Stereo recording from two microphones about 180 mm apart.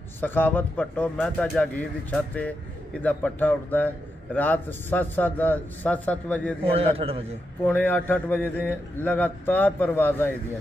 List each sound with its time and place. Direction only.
0.2 s a man's voice: 10° left (ahead or behind)
6.6 s a man's voice: 35° right (ahead or behind)
7.6 s a man's voice: 10° left (ahead or behind)